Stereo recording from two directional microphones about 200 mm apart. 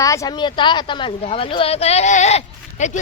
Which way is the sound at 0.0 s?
15° left (ahead or behind).